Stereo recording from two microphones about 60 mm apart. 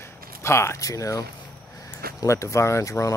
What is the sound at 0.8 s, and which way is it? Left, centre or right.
Speech, left.